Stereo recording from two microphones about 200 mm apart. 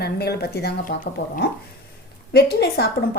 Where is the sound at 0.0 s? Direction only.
55° left (ahead or behind).